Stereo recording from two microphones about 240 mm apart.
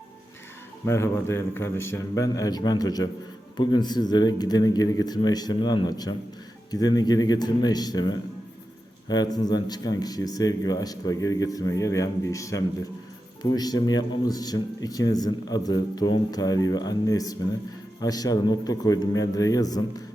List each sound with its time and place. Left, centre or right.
0.9 s speech: centre